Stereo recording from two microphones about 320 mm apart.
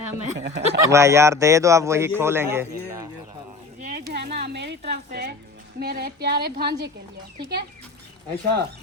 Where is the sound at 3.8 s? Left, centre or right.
Right.